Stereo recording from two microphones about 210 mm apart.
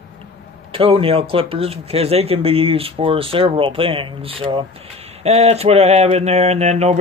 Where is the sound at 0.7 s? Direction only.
25° right (ahead or behind).